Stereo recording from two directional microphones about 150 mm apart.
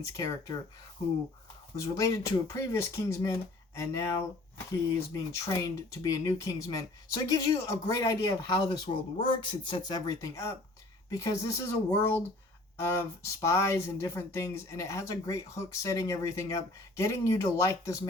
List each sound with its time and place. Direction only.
0.0 s speech: 25° left (ahead or behind)
1.7 s speech: 20° left (ahead or behind)